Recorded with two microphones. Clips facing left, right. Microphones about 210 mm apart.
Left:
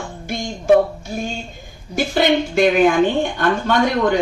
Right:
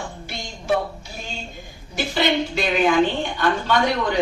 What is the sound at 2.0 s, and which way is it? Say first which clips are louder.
Speech: left 5 dB; 50° left (ahead or behind).